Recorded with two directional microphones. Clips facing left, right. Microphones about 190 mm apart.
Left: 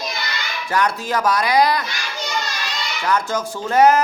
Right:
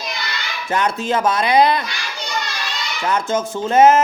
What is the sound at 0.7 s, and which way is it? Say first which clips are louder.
Speech: right 1 dB; 25° right (ahead or behind).